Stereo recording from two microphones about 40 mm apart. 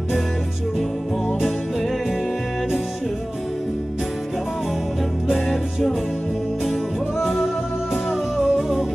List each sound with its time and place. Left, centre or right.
5.3 s music: centre